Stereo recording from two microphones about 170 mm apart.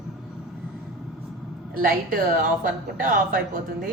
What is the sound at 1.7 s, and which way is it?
A woman's voice, 55° right (ahead or behind).